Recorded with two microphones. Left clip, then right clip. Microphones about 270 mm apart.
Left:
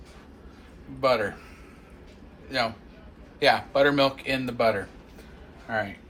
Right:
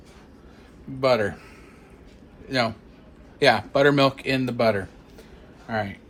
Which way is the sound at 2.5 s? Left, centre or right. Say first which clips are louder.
Right 3 dB; right.